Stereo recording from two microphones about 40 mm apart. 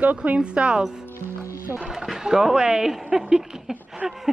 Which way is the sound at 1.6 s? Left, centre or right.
Right.